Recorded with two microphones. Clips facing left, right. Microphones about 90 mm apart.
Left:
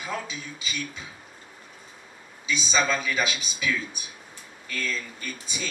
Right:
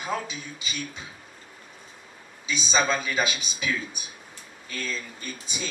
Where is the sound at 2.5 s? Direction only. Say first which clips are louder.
Even; 25° right (ahead or behind).